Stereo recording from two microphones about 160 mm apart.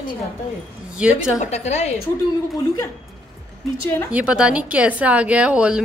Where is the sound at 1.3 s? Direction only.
45° left (ahead or behind).